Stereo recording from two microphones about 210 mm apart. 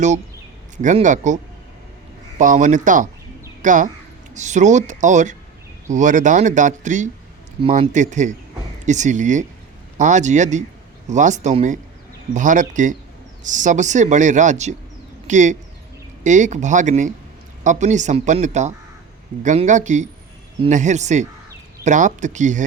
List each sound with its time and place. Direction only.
0.8 s speech: 35° right (ahead or behind)
2.4 s speech: 35° right (ahead or behind)